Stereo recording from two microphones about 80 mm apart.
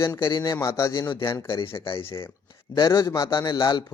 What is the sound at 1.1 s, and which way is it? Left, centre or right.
Speech, left.